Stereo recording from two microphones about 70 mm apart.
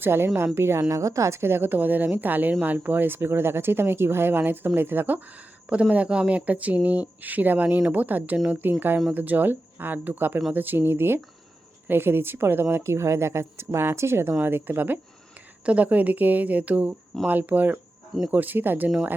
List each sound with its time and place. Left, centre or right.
0.0 s a woman's voice: right
15.6 s speech: right